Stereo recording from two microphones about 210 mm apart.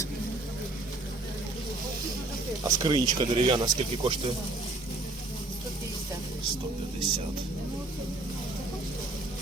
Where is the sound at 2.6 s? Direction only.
20° right (ahead or behind).